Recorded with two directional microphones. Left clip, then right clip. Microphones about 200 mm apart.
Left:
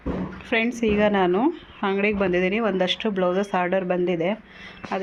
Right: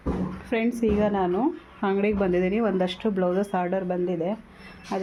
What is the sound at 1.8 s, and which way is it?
A woman's voice, 5° right (ahead or behind).